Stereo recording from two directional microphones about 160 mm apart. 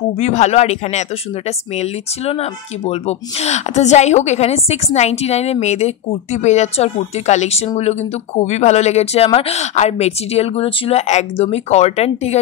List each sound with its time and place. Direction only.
0.2 s speech: 45° left (ahead or behind)